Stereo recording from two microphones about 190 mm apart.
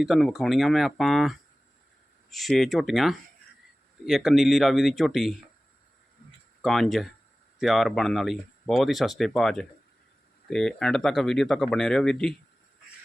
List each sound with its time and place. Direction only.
0.0 s speech: centre (ahead or behind)
6.6 s speech: centre (ahead or behind)